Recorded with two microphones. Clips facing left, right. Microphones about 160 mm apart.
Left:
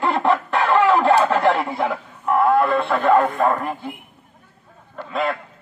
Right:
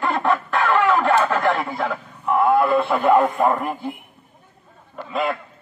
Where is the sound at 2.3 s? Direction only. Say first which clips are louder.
Even; centre (ahead or behind).